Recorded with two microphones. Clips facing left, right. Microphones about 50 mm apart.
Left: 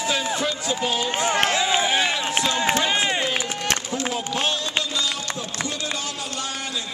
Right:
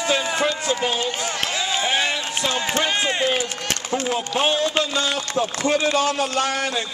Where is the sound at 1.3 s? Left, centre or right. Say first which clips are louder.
Left 5 dB; left.